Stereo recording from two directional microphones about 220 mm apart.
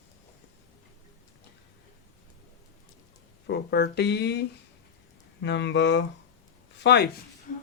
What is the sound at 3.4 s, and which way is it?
Speech, 50° left (ahead or behind).